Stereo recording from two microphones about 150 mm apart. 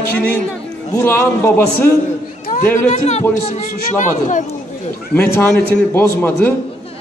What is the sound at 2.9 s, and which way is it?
Speech, 50° left (ahead or behind).